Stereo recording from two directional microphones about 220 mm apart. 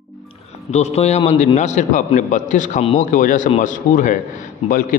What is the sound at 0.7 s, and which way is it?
Speech, 30° left (ahead or behind).